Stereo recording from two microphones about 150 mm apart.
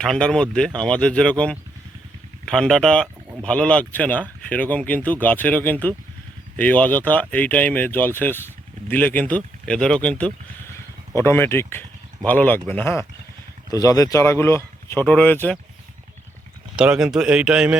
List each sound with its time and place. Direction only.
0.0 s speech: 5° left (ahead or behind)
16.7 s speech: 5° right (ahead or behind)